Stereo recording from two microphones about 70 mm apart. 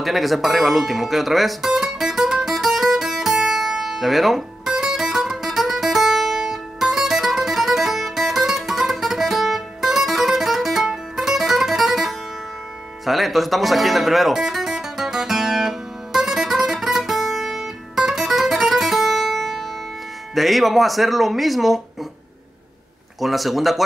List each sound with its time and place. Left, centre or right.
0.0 s music: centre
20.3 s speech: centre
23.2 s speech: centre